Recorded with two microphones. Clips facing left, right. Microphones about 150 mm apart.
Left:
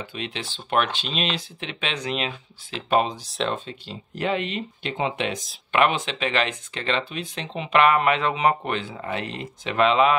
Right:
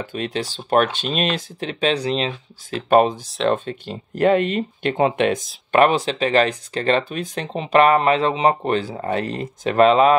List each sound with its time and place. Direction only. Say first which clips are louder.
0.0 s speech: right 7 dB; 45° right (ahead or behind)
2.7 s speech: right 7 dB; 50° right (ahead or behind)
5.7 s speech: right 6 dB; 40° right (ahead or behind)